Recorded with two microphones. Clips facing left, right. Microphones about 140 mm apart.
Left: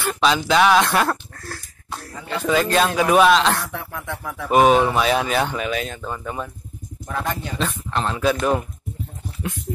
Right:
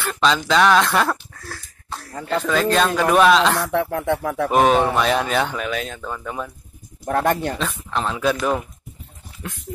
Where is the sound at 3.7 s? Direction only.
65° right (ahead or behind).